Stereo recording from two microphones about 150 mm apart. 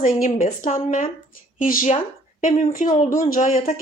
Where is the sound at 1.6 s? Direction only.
65° left (ahead or behind).